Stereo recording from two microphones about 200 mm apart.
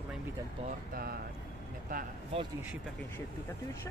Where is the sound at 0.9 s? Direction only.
50° right (ahead or behind).